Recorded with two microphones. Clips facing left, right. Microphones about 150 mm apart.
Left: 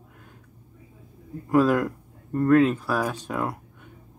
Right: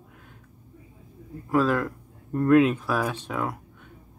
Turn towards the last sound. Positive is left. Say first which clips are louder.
# left 1 dB
turn(degrees=0)  # may be behind; listen again after turning